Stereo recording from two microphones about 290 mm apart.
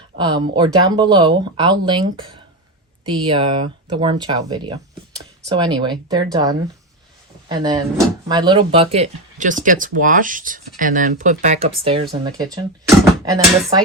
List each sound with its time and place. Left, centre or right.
0.2 s speech: centre